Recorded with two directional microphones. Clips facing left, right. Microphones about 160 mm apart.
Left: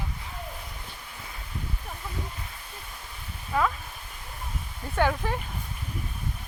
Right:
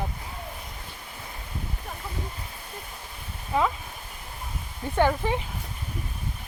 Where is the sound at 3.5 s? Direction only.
20° right (ahead or behind).